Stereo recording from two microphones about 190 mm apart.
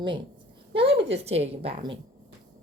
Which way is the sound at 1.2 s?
35° right (ahead or behind).